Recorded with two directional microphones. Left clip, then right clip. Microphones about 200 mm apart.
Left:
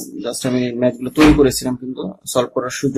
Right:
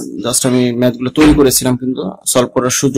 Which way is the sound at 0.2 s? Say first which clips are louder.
Right 6 dB; 30° right (ahead or behind).